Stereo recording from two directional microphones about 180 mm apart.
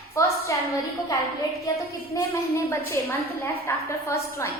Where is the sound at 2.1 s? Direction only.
15° left (ahead or behind).